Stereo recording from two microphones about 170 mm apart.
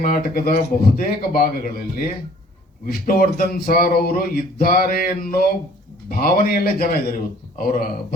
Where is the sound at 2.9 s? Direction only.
55° left (ahead or behind).